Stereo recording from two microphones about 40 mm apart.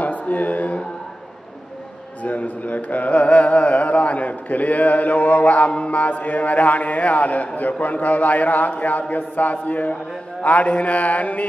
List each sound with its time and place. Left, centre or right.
0.0 s a sound: left
2.2 s mantra: left
5.7 s a man's voice: left